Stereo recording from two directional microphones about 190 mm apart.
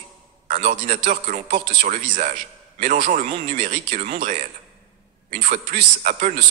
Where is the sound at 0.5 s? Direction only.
40° right (ahead or behind).